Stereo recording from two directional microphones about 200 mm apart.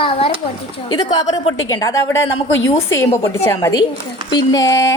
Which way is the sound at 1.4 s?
90° left.